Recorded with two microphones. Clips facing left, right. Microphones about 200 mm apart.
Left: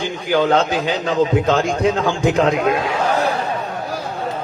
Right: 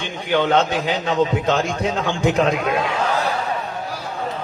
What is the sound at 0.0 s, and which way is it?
A man's voice, 30° left (ahead or behind).